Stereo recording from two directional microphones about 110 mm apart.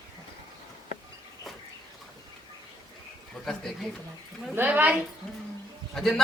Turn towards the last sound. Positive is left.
turn(degrees=5)  # may be behind; listen again after turning